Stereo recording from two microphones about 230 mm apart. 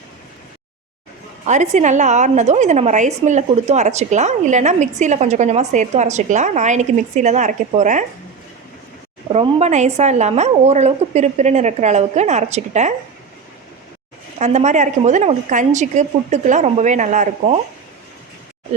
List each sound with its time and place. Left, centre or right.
1.5 s a woman's voice: right
9.3 s a woman's voice: right
14.3 s a woman's voice: right